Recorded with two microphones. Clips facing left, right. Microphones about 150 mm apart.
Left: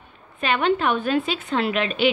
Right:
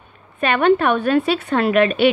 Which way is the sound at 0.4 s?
55° right (ahead or behind).